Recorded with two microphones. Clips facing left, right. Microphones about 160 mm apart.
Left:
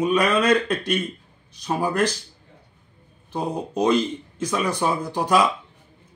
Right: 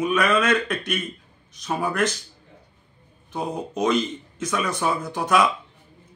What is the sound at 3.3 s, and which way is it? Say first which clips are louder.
Speech: left 2 dB; 30° left (ahead or behind).